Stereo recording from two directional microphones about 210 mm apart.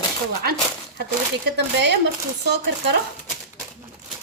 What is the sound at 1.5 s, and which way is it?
Speech, 50° right (ahead or behind).